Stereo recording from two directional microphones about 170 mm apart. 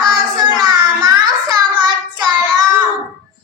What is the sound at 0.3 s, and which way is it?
Child singing, 25° right (ahead or behind).